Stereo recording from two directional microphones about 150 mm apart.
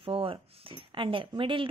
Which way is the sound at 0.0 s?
35° right (ahead or behind).